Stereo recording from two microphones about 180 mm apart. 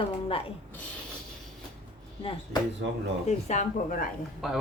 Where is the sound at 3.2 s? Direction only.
40° left (ahead or behind).